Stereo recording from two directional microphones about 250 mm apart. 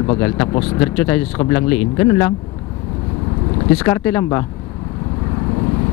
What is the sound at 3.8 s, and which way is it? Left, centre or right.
Speech, centre.